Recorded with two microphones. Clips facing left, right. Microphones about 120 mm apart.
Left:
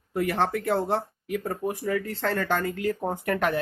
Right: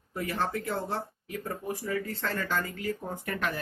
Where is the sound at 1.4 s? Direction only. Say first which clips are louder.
Left 2 dB; 45° left (ahead or behind).